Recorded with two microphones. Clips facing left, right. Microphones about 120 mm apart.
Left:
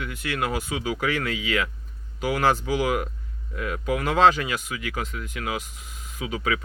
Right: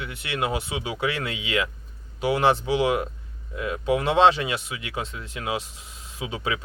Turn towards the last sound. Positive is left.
turn(degrees=-25)  # may be behind; listen again after turning